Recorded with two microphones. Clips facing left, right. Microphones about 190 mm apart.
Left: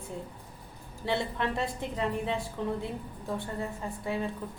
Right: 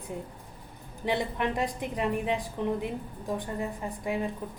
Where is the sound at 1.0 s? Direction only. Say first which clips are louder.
Right 2 dB; 15° right (ahead or behind).